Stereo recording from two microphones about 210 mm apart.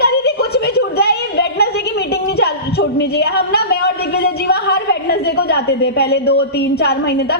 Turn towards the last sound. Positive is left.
turn(degrees=50)  # may be behind; listen again after turning